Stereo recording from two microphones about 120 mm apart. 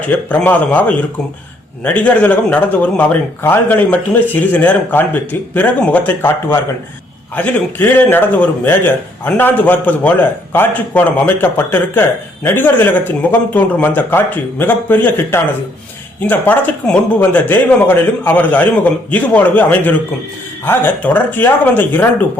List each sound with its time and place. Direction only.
0.3 s speech: 10° left (ahead or behind)